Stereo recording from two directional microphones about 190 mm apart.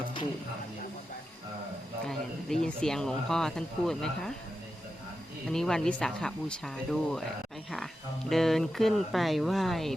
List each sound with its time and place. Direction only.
2.0 s speech: 5° left (ahead or behind)
5.5 s speech: 5° left (ahead or behind)
8.3 s speech: centre (ahead or behind)